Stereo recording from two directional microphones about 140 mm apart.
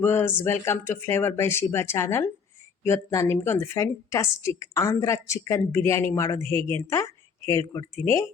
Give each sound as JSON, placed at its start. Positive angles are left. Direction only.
{"t": 0.0, "sound": "a woman's voice", "side_deg": 15}